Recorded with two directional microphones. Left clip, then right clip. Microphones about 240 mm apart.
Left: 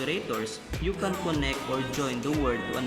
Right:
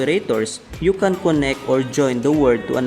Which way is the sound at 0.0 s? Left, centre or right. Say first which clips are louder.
Right 12 dB; right.